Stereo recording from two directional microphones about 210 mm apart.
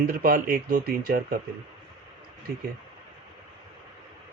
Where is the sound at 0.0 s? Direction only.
45° right (ahead or behind).